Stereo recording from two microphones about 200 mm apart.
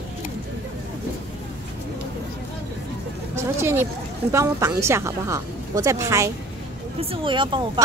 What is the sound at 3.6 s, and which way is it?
Speech, 10° right (ahead or behind).